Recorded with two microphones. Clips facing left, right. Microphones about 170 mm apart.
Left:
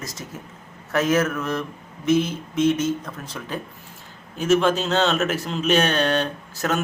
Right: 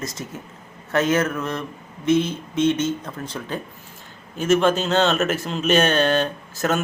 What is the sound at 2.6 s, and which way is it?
Speech, 25° right (ahead or behind).